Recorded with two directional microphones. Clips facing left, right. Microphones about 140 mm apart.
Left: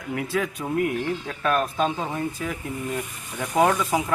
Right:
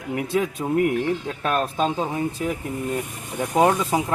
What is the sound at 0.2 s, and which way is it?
Speech, 20° right (ahead or behind).